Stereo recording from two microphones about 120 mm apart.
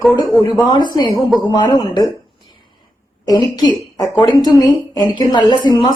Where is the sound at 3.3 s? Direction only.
35° left (ahead or behind).